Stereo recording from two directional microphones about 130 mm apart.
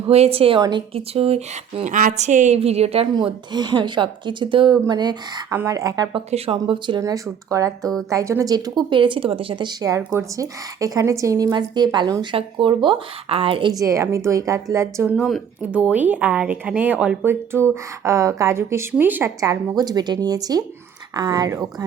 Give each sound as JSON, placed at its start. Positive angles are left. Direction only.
{"t": 0.1, "sound": "a woman's voice", "side_deg": -50}
{"t": 2.6, "sound": "a woman's voice", "side_deg": -55}
{"t": 3.2, "sound": "a woman's voice", "side_deg": -35}
{"t": 6.1, "sound": "a woman's voice", "side_deg": -45}
{"t": 6.7, "sound": "a woman's voice", "side_deg": -35}
{"t": 7.0, "sound": "a woman's voice", "side_deg": -25}
{"t": 13.7, "sound": "a woman's voice", "side_deg": -25}
{"t": 15.1, "sound": "speech", "side_deg": 0}
{"t": 15.7, "sound": "a woman's voice", "side_deg": -10}
{"t": 19.4, "sound": "a woman's voice", "side_deg": -30}